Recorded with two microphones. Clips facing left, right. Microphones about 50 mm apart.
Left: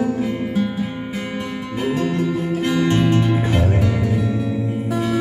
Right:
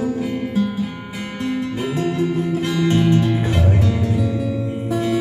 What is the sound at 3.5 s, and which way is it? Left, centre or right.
Music, left.